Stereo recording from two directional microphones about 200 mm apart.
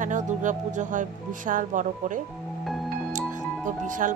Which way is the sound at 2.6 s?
Centre (ahead or behind).